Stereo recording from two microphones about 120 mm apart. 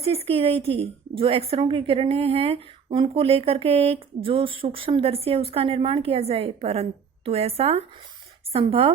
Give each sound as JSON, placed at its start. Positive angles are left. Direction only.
{"t": 0.0, "sound": "a woman's voice", "side_deg": -55}